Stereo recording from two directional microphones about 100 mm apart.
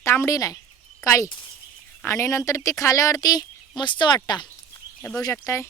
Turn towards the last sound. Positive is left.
turn(degrees=30)  # may be behind; listen again after turning